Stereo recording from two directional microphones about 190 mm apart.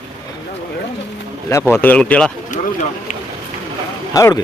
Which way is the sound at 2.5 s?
40° left (ahead or behind).